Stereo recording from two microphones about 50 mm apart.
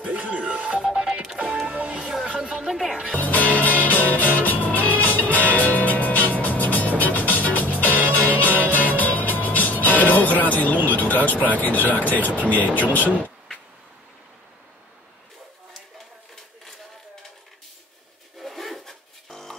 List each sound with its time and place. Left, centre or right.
0.0 s music: right
1.7 s music: right
2.6 s music: centre
3.2 s music: left
10.9 s speech: left
18.4 s a sound: centre